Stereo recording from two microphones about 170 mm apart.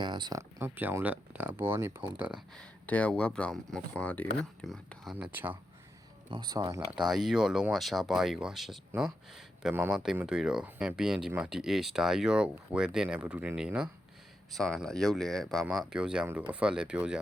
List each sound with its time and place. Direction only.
0.0 s speech: 25° right (ahead or behind); by 2.4 s 10° right (ahead or behind)
2.6 s speech: 10° left (ahead or behind)
5.1 s speech: 10° right (ahead or behind)
6.3 s speech: 25° right (ahead or behind)
7.1 s speech: centre (ahead or behind)
9.7 s speech: 10° right (ahead or behind)